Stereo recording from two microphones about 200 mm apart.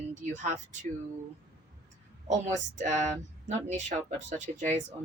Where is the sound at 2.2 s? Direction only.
35° right (ahead or behind).